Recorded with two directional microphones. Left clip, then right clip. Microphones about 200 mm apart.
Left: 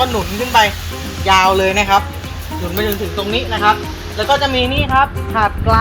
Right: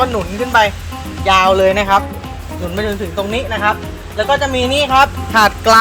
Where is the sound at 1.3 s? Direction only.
30° right (ahead or behind).